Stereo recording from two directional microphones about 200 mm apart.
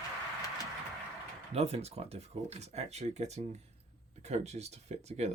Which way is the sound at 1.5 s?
30° right (ahead or behind).